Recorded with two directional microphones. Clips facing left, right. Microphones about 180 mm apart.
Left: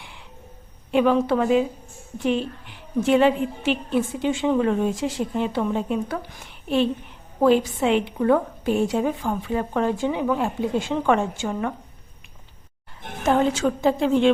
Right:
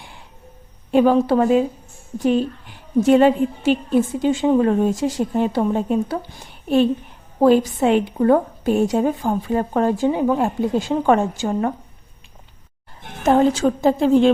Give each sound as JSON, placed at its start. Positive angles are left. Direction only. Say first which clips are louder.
{"t": 0.9, "sound": "a woman's voice", "louder": "right 4 dB", "side_deg": -40}
{"t": 7.4, "sound": "a woman's voice", "louder": "right 4 dB", "side_deg": -40}
{"t": 13.2, "sound": "a woman's voice", "louder": "right 4 dB", "side_deg": -40}